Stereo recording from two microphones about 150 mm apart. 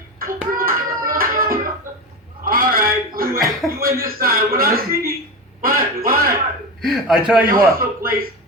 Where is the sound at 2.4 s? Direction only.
70° right (ahead or behind).